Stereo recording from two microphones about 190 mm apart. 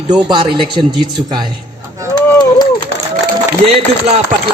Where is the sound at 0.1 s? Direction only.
25° right (ahead or behind).